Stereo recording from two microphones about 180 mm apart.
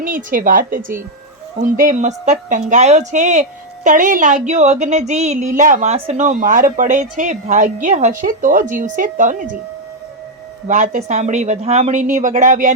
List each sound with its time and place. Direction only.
0.0 s a woman's voice: 50° right (ahead or behind)
10.7 s a woman's voice: 45° right (ahead or behind)